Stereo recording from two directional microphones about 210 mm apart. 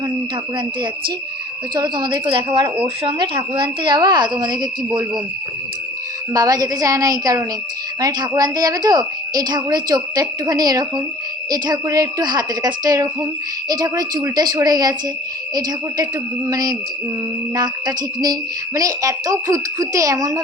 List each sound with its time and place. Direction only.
1.7 s a woman's voice: 20° right (ahead or behind)
6.3 s a woman's voice: 20° right (ahead or behind)
16.5 s speech: 20° right (ahead or behind)